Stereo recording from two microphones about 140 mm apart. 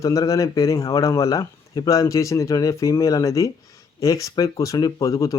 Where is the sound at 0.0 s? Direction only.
20° left (ahead or behind).